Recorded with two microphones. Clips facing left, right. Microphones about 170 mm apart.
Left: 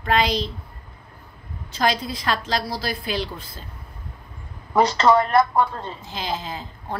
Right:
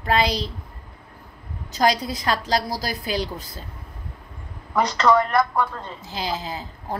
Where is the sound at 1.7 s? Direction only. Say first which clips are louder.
Right 2 dB; 40° right (ahead or behind).